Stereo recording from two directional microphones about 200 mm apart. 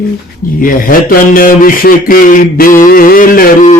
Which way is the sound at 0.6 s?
45° left (ahead or behind).